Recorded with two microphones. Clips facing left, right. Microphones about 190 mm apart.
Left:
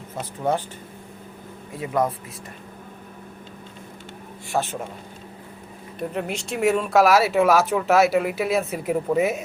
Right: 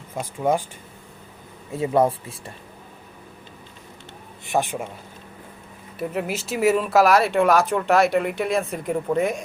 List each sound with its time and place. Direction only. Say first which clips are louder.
0.2 s speech: right 2 dB; 10° right (ahead or behind)
1.7 s speech: right 4 dB; 25° right (ahead or behind)
4.4 s speech: right 2 dB; 15° right (ahead or behind)
6.0 s speech: right 1 dB; 5° right (ahead or behind)